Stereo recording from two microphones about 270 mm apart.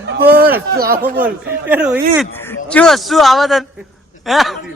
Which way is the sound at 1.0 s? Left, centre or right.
Centre.